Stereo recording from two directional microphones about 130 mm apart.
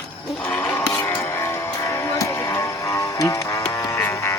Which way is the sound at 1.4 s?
20° left (ahead or behind).